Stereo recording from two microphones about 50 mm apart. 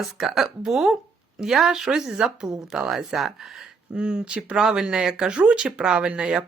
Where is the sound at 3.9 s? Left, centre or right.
Centre.